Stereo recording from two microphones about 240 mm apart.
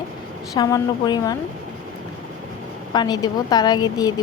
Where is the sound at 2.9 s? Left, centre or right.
Centre.